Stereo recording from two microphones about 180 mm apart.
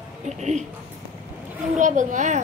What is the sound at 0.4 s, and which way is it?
Speech, 40° right (ahead or behind).